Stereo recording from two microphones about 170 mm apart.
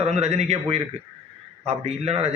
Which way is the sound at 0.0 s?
40° right (ahead or behind).